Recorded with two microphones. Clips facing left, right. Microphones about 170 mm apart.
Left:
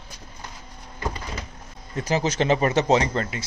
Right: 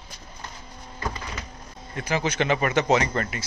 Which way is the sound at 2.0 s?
35° left (ahead or behind).